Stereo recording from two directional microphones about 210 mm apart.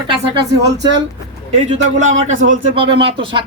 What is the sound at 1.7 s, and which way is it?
Speech, 35° right (ahead or behind).